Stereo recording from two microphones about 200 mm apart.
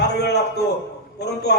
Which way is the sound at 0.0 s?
55° left (ahead or behind).